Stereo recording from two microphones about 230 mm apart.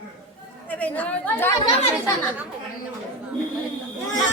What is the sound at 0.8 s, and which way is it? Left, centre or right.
Speech, centre.